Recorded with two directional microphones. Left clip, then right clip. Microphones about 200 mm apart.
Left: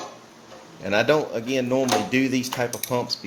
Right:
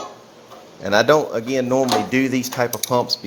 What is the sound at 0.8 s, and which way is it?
Speech, 15° right (ahead or behind).